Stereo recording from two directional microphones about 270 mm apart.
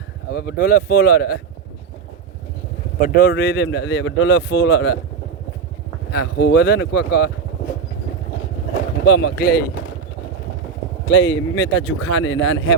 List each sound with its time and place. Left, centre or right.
0.3 s a man's voice: left
3.0 s a man's voice: left
6.1 s a man's voice: left
9.0 s a man's voice: left
11.1 s speech: left